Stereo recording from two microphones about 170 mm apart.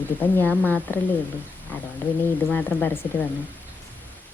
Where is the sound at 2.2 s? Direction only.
10° left (ahead or behind).